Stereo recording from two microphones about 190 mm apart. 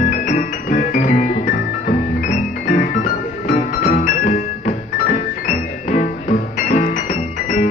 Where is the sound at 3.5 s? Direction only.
45° left (ahead or behind).